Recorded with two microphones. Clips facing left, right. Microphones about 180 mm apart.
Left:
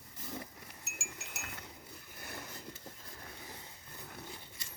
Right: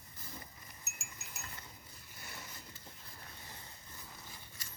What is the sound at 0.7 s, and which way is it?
Wind chime, 80° left.